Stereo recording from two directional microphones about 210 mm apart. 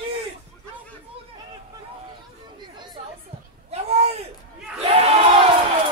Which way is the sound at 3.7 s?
30° right (ahead or behind).